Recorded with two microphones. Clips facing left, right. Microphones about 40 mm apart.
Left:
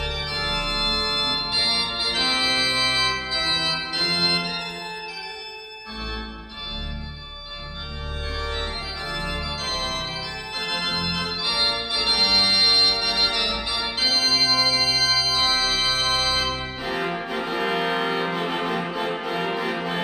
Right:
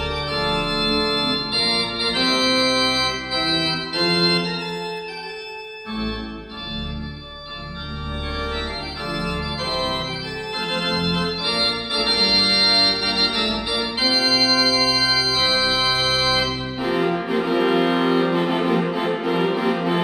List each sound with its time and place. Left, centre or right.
0.1 s organ: centre
3.9 s organ: centre
9.7 s organ: right
16.4 s brass instrument: centre